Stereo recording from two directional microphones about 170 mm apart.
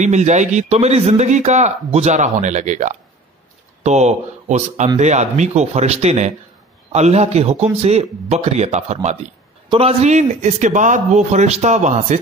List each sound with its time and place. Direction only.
0.0 s a man's voice: 45° right (ahead or behind)